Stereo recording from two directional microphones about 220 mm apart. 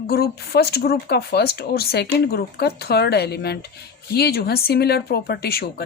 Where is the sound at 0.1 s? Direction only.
45° left (ahead or behind).